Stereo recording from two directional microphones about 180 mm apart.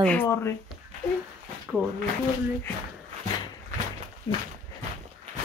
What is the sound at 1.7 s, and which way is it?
Speech, 5° right (ahead or behind).